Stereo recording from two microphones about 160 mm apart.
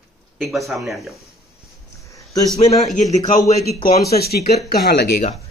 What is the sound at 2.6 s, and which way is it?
Speech, 45° left (ahead or behind).